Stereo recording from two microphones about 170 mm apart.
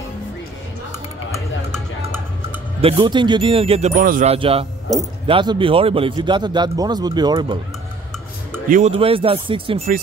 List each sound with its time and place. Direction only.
2.8 s speech: 35° right (ahead or behind)
3.9 s speech: 50° right (ahead or behind)
4.3 s speech: 35° right (ahead or behind)
8.6 s speech: 50° right (ahead or behind)
8.9 s speech: 30° right (ahead or behind)